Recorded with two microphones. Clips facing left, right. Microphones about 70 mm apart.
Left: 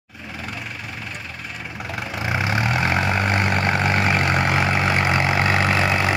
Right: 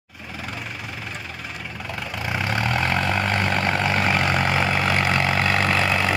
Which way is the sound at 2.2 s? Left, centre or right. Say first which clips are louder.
Left 2 dB; centre.